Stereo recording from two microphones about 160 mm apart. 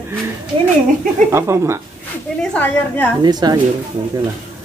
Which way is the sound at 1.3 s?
15° right (ahead or behind).